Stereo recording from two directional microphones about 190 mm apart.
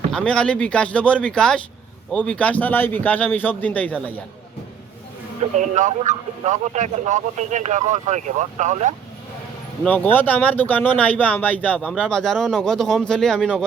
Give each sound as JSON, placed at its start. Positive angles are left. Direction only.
{"t": 0.1, "sound": "speech", "side_deg": 5}
{"t": 5.5, "sound": "speech", "side_deg": -40}
{"t": 9.8, "sound": "speech", "side_deg": 10}